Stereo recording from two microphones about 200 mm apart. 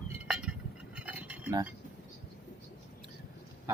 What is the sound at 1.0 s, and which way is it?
Cutlery, 5° right (ahead or behind).